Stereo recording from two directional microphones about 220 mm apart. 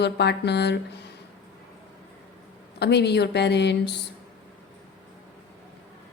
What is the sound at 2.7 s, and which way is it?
A woman's voice, 50° left (ahead or behind).